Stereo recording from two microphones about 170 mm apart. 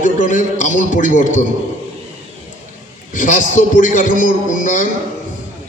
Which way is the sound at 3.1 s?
50° left (ahead or behind).